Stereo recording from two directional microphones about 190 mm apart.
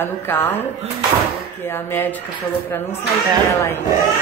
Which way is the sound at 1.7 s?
10° left (ahead or behind).